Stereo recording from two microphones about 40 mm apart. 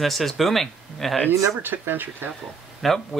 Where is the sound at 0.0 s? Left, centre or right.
Centre.